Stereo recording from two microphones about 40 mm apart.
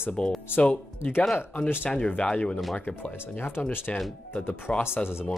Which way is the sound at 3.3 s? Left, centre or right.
Left.